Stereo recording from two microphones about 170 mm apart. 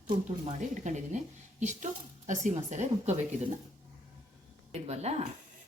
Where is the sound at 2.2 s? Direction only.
45° right (ahead or behind).